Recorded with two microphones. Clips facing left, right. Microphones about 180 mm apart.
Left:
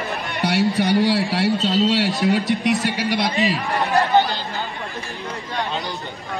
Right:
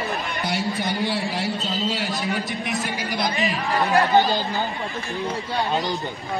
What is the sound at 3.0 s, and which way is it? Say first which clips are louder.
Speech: left 4 dB; centre (ahead or behind).